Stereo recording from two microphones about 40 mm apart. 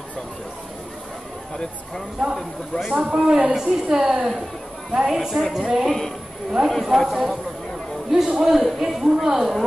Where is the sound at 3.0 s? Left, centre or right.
Centre.